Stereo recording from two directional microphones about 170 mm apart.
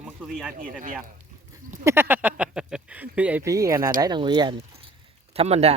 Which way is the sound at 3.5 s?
20° right (ahead or behind).